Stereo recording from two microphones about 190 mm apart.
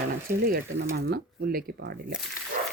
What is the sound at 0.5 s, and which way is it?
Speech, 55° right (ahead or behind).